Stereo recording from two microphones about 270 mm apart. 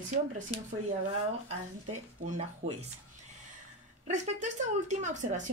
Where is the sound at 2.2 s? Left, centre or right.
Right.